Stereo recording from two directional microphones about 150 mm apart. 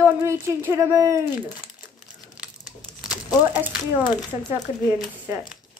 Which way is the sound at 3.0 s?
10° right (ahead or behind).